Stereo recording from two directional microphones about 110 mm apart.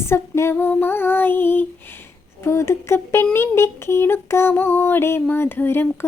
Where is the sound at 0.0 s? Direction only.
25° left (ahead or behind).